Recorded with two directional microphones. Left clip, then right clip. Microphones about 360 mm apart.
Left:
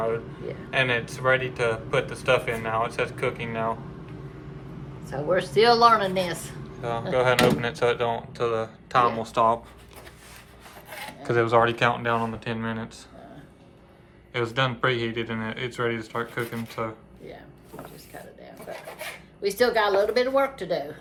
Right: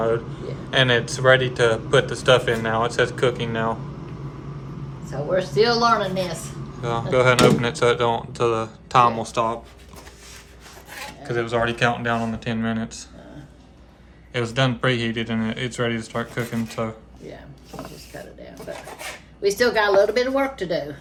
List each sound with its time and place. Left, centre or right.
0.7 s speech: centre
5.3 s speech: left
7.1 s speech: centre
10.9 s speech: centre
14.3 s speech: centre
19.0 s speech: centre